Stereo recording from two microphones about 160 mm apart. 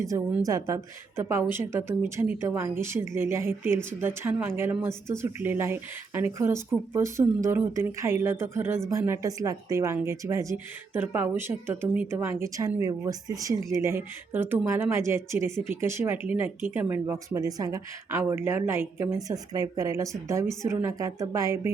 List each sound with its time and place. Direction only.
0.4 s speech: 20° right (ahead or behind)